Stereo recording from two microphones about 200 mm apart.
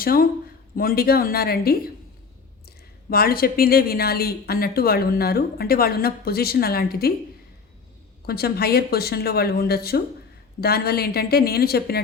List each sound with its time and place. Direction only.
0.0 s speech: 45° left (ahead or behind)
8.3 s speech: 50° left (ahead or behind)